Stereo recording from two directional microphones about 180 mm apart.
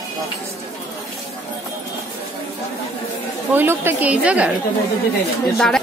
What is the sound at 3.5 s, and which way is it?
A woman's voice, 10° right (ahead or behind).